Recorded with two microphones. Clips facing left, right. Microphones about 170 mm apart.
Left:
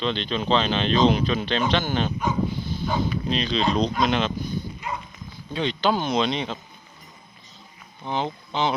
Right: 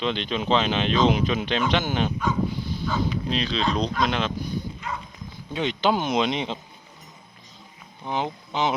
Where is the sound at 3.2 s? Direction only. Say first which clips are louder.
Left 2 dB; 5° right (ahead or behind).